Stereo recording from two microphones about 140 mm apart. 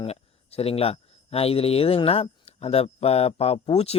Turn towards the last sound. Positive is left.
turn(degrees=45)  # may be behind; listen again after turning